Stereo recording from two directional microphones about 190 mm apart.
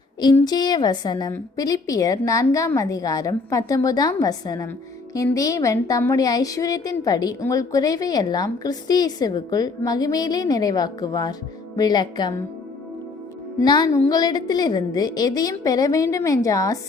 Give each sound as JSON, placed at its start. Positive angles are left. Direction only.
{"t": 0.4, "sound": "a woman's voice", "side_deg": 20}
{"t": 13.6, "sound": "a woman's voice", "side_deg": 20}